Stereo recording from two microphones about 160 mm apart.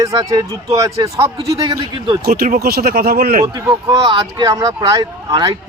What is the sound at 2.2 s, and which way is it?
Speech, 70° right (ahead or behind).